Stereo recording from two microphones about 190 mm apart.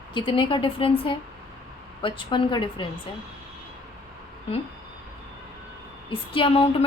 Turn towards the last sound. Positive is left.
turn(degrees=30)  # may be behind; listen again after turning